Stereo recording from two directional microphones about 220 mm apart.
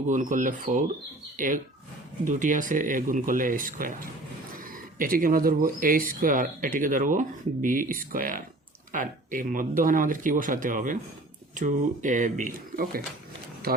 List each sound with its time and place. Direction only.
0.1 s speech: 35° right (ahead or behind)